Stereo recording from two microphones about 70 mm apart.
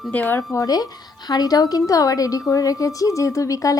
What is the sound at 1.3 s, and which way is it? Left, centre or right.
A woman's voice, left.